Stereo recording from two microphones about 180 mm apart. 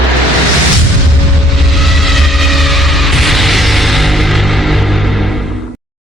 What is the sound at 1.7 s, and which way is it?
Music, centre (ahead or behind).